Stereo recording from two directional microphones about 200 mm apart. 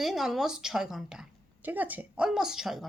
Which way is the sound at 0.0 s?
Centre (ahead or behind).